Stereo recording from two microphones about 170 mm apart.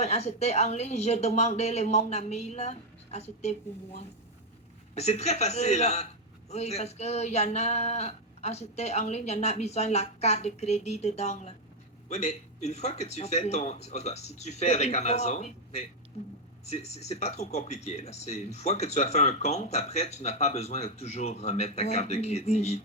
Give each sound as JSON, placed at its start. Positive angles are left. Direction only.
{"t": 0.0, "sound": "speech", "side_deg": 40}
{"t": 4.9, "sound": "speech", "side_deg": 40}